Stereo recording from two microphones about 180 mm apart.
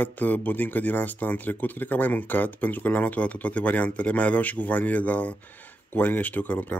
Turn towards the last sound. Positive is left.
turn(degrees=10)  # may be behind; listen again after turning